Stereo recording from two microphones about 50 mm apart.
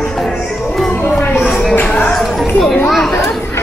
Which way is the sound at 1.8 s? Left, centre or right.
Left.